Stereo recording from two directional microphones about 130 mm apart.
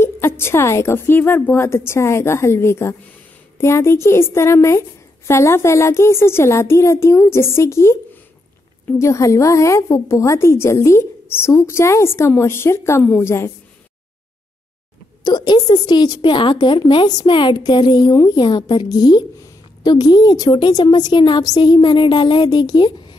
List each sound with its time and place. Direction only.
0.0 s a woman's voice: 20° left (ahead or behind)
15.2 s a woman's voice: 35° left (ahead or behind)